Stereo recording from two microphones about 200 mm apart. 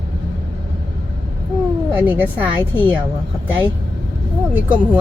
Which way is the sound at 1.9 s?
10° right (ahead or behind).